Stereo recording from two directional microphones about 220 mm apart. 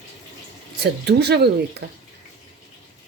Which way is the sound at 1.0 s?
50° right (ahead or behind).